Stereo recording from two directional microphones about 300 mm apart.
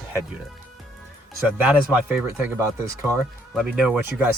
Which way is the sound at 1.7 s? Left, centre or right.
Centre.